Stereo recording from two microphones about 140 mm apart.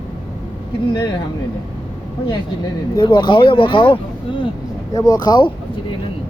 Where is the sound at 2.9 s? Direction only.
35° left (ahead or behind).